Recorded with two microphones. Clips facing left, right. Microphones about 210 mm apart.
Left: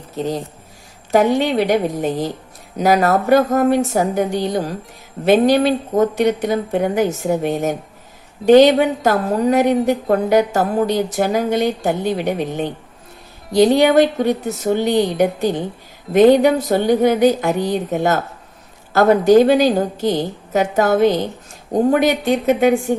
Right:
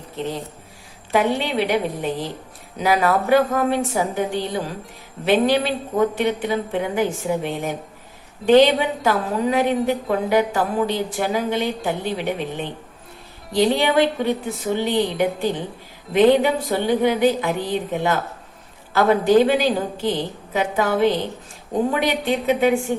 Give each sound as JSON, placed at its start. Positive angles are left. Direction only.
{"t": 1.1, "sound": "a woman's voice", "side_deg": 45}